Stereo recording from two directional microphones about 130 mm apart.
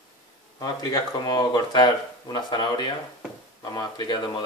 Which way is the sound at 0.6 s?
30° left (ahead or behind).